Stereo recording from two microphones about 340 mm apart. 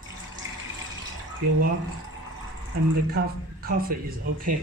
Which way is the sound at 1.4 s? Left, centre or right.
Right.